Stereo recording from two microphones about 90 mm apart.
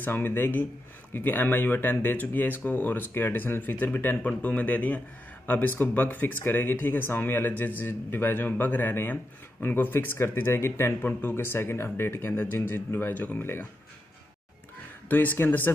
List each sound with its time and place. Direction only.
0.0 s speech: 20° left (ahead or behind)
15.0 s speech: 20° left (ahead or behind)